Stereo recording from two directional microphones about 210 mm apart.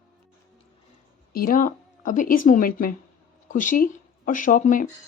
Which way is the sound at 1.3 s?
45° left (ahead or behind).